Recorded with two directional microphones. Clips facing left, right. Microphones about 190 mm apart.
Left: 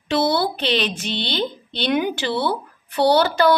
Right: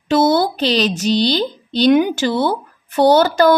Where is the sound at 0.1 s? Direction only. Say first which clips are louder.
Right 5 dB; 45° right (ahead or behind).